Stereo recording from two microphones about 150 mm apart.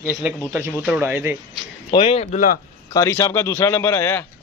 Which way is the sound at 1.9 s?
35° left (ahead or behind).